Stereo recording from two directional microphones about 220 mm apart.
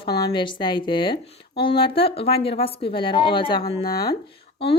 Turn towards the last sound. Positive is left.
turn(degrees=50)  # may be behind; listen again after turning